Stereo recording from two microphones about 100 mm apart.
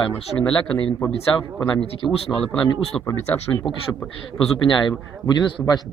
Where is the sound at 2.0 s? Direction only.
20° left (ahead or behind).